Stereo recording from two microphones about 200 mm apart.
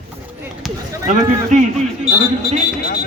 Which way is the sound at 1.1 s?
35° right (ahead or behind).